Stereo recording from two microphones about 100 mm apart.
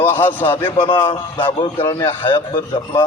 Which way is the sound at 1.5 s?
60° left (ahead or behind).